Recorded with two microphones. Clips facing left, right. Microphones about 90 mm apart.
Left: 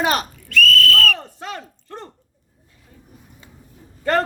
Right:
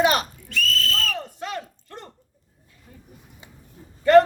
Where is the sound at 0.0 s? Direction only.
35° left (ahead or behind).